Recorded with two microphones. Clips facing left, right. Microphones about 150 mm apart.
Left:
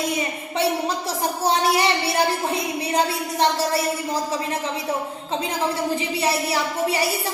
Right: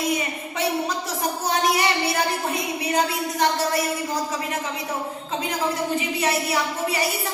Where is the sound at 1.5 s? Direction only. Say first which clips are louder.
Left 2 dB; 30° left (ahead or behind).